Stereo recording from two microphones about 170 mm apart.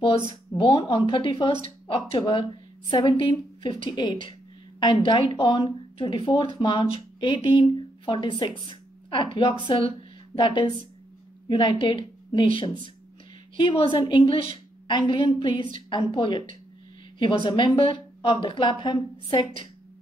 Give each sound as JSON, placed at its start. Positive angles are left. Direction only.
{"t": 0.6, "sound": "a woman's voice", "side_deg": 30}